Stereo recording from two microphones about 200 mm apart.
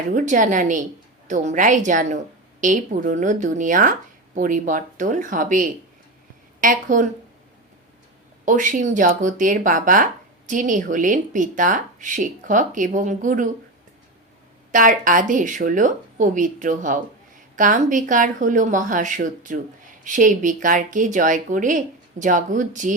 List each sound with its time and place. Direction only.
0.1 s speech: 40° right (ahead or behind)
8.4 s speech: 40° right (ahead or behind)
14.7 s speech: 40° right (ahead or behind)